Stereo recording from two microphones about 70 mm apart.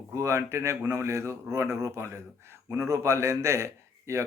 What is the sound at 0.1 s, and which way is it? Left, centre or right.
Speech, right.